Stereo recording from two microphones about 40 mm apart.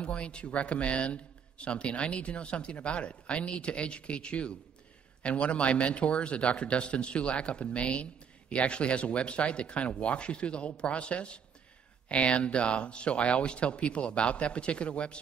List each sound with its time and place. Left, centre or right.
0.0 s speech: left